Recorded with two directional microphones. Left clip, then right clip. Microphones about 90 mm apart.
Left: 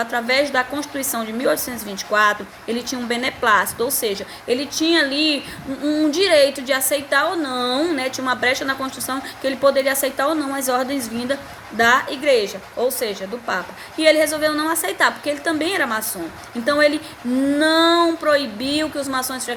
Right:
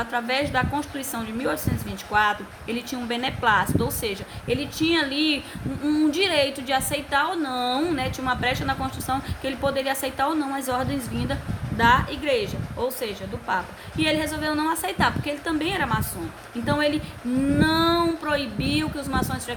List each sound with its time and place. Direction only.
0.0 s a woman's voice: 45° right (ahead or behind)
5.8 s a woman's voice: 55° right (ahead or behind)